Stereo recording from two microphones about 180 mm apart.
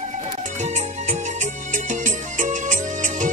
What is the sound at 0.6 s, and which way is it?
Music, 40° right (ahead or behind).